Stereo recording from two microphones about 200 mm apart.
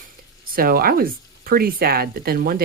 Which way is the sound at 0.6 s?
50° right (ahead or behind).